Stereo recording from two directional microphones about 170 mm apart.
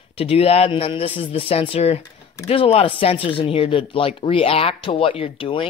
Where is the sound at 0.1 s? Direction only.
35° left (ahead or behind).